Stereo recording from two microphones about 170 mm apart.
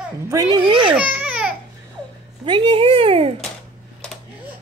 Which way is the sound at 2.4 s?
30° right (ahead or behind).